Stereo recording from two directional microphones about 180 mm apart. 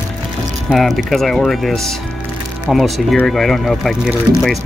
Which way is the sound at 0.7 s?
Centre (ahead or behind).